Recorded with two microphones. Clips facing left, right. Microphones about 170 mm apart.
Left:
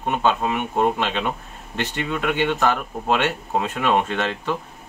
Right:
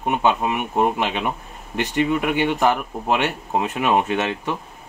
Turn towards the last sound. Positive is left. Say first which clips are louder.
# right 2 dB
turn(degrees=-15)  # may be behind; listen again after turning